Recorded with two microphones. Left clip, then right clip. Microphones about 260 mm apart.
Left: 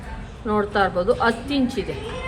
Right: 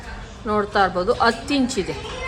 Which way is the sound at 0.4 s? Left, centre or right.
Centre.